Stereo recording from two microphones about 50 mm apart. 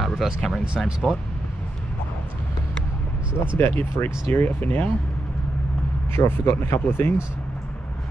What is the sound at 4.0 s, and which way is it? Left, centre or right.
Speech, left.